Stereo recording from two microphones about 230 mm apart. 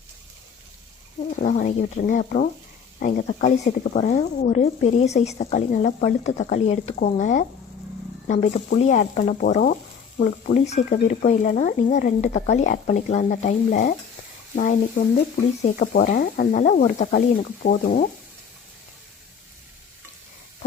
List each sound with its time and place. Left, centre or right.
1.3 s speech: left